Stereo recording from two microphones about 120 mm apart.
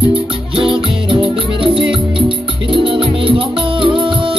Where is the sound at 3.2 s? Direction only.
45° right (ahead or behind).